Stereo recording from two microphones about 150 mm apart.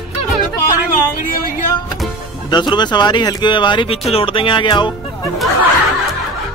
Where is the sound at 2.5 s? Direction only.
30° left (ahead or behind).